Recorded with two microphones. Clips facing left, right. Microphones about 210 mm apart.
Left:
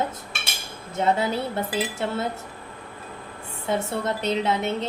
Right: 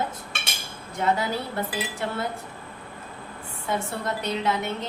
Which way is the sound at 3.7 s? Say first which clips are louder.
Left 3 dB; 25° left (ahead or behind).